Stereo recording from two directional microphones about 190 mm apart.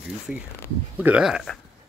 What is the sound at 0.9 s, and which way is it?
Speech, 5° right (ahead or behind).